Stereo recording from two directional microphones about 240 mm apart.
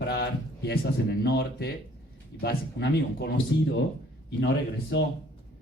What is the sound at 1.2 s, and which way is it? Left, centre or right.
A man's voice, left.